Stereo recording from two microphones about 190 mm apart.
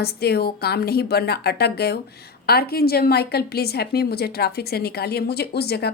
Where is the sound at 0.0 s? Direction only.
55° left (ahead or behind).